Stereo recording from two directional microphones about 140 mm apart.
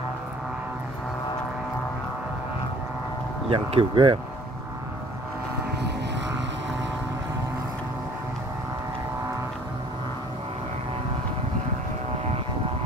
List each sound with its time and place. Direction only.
3.4 s speech: 45° right (ahead or behind)